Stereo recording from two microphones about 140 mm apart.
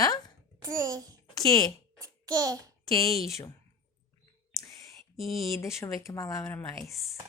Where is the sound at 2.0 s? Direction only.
25° right (ahead or behind).